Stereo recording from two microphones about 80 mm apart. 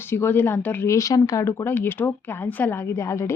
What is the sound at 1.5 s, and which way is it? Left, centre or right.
A woman's voice, left.